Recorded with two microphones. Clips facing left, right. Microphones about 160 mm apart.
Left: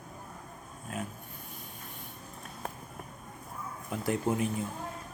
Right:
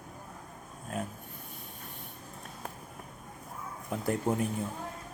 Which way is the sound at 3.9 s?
35° right (ahead or behind).